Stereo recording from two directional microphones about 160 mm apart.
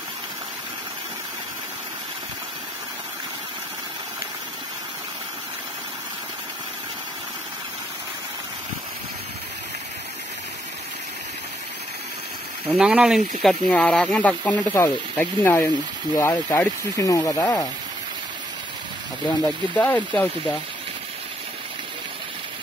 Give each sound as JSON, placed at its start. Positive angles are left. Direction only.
{"t": 12.7, "sound": "speech", "side_deg": -5}
{"t": 19.2, "sound": "speech", "side_deg": 10}